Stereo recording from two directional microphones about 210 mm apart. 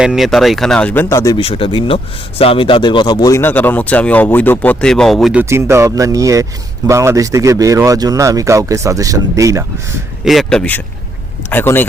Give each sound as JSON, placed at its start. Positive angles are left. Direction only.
{"t": 0.0, "sound": "speech", "side_deg": 0}
{"t": 1.4, "sound": "speech", "side_deg": 25}
{"t": 10.2, "sound": "speech", "side_deg": 0}